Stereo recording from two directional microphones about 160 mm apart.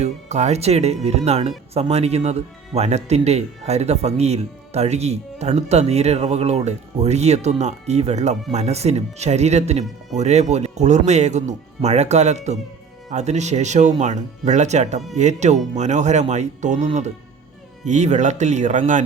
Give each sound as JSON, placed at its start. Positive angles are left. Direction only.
{"t": 0.0, "sound": "speech", "side_deg": -45}